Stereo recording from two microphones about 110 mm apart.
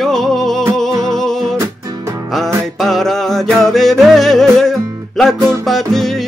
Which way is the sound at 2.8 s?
Centre (ahead or behind).